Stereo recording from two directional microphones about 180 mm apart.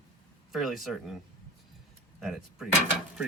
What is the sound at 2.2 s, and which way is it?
Speech, centre (ahead or behind).